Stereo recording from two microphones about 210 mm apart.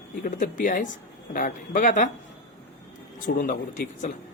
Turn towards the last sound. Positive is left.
turn(degrees=40)  # may be behind; listen again after turning